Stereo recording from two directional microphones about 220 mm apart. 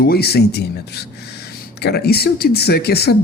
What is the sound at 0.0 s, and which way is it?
Speech, 45° left (ahead or behind).